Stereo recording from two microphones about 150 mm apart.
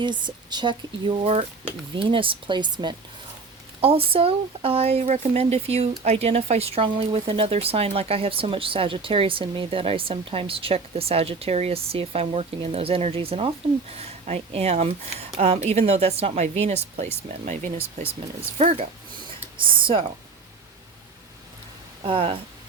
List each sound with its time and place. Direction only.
0.0 s speech: 30° right (ahead or behind); by 17.8 s 55° right (ahead or behind)
18.5 s speech: 45° right (ahead or behind)
22.0 s speech: 35° right (ahead or behind)